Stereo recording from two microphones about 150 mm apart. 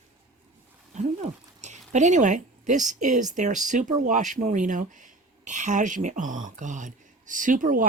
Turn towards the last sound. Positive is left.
turn(degrees=-60)  # may be behind; listen again after turning